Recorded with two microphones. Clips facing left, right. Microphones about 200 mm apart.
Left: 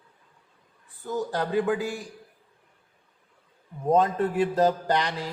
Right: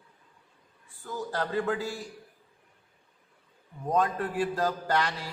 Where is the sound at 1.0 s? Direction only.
20° left (ahead or behind).